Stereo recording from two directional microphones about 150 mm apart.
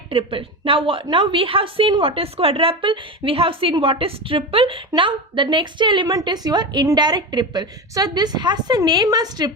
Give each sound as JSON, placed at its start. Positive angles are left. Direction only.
{"t": 0.1, "sound": "a woman's voice", "side_deg": -35}